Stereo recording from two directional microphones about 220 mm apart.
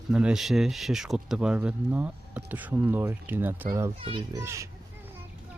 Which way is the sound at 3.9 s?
25° right (ahead or behind).